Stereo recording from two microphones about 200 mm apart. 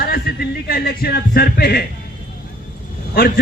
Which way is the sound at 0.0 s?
50° left (ahead or behind).